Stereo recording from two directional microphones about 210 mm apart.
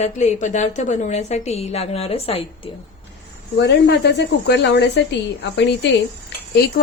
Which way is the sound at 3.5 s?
55° left (ahead or behind).